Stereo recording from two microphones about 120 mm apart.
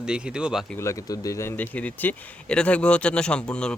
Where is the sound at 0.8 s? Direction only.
25° left (ahead or behind).